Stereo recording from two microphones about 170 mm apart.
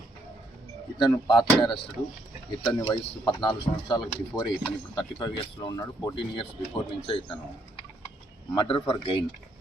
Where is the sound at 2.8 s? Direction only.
25° left (ahead or behind).